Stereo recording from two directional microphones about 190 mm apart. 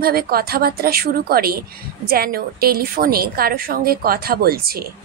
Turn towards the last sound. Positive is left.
turn(degrees=-50)  # may be behind; listen again after turning